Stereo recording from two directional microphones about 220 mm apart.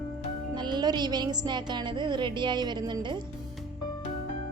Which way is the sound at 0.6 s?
20° right (ahead or behind).